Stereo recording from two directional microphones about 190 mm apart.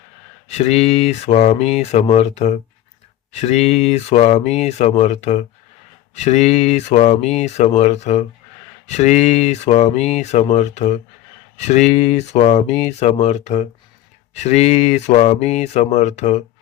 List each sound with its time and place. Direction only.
0.4 s speech: 35° left (ahead or behind)